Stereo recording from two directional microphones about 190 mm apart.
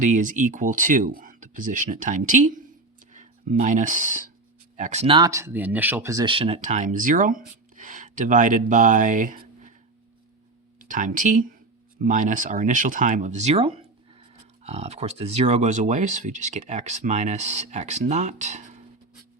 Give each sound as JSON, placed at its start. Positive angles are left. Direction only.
{"t": 0.0, "sound": "speech", "side_deg": -40}
{"t": 10.8, "sound": "speech", "side_deg": -45}